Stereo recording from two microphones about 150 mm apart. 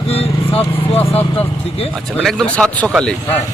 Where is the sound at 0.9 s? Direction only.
10° left (ahead or behind).